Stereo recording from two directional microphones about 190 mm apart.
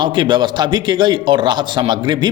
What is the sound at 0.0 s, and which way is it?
A man's voice, 25° right (ahead or behind).